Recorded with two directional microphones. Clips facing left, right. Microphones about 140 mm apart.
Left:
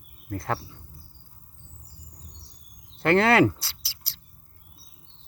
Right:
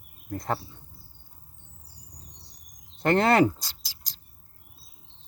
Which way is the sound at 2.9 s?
15° right (ahead or behind).